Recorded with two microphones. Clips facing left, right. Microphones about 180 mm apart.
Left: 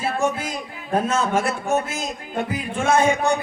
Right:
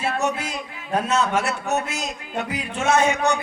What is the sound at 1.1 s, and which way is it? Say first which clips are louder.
Speech: even; 50° left (ahead or behind).